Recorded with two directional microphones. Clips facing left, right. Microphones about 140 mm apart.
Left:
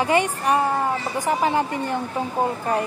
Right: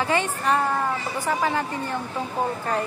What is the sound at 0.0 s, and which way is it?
A woman's voice, 15° left (ahead or behind).